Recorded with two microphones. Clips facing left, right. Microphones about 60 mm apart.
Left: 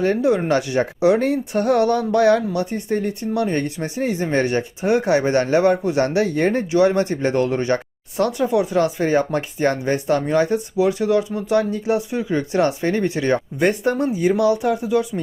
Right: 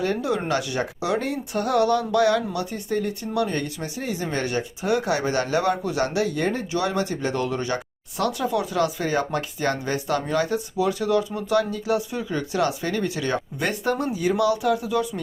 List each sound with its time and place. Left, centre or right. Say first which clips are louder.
0.0 s speech: left 6 dB; left
6.7 s speech: left 8 dB; left